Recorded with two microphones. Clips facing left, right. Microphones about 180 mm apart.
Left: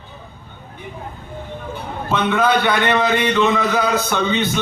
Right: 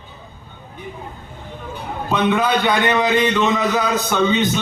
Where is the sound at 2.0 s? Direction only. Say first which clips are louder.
Even; 15° right (ahead or behind).